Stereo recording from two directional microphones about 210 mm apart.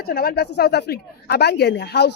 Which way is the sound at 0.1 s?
45° left (ahead or behind).